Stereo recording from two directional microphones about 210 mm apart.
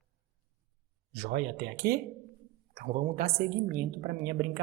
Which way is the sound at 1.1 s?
50° right (ahead or behind).